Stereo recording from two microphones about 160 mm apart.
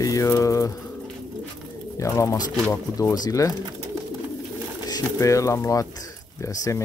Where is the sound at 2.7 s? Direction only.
20° left (ahead or behind).